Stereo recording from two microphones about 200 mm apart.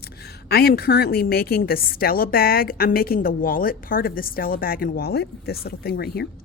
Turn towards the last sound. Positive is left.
turn(degrees=50)  # may be behind; listen again after turning